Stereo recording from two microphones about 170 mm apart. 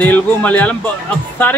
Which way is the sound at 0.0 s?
10° left (ahead or behind).